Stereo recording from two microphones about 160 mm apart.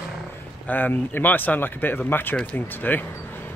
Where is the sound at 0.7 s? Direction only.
10° left (ahead or behind).